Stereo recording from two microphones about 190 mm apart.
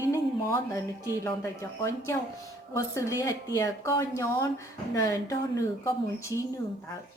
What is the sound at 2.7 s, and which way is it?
Speech, 15° left (ahead or behind).